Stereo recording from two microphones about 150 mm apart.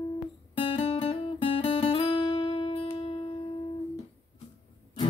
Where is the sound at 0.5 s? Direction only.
35° left (ahead or behind).